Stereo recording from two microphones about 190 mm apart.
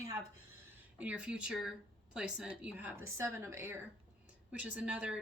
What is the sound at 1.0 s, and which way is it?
Speech, 5° right (ahead or behind).